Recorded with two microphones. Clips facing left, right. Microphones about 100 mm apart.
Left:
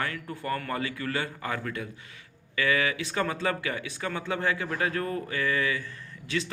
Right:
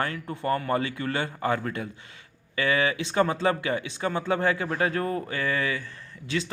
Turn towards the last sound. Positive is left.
turn(degrees=-30)  # may be behind; listen again after turning